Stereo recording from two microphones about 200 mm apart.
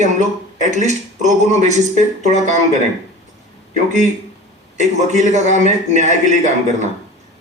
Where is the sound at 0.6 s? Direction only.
35° right (ahead or behind).